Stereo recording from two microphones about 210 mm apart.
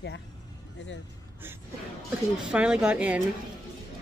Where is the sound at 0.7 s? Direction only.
60° left (ahead or behind).